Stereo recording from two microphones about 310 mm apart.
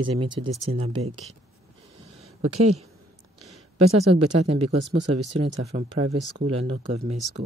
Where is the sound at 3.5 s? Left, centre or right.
Centre.